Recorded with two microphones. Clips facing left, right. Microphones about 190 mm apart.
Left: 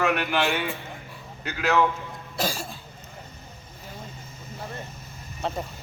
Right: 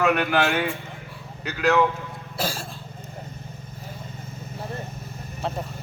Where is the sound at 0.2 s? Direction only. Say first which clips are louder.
Right 3 dB; 45° right (ahead or behind).